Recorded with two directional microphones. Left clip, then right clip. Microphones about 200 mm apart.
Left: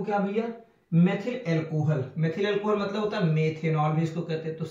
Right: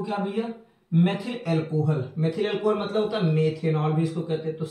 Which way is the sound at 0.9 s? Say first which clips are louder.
Right 1 dB; 15° right (ahead or behind).